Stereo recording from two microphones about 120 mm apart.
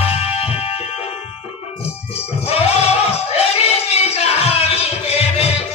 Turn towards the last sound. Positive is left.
turn(degrees=55)  # may be behind; listen again after turning